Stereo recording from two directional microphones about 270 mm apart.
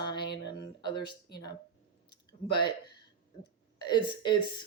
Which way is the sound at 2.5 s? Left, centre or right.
Centre.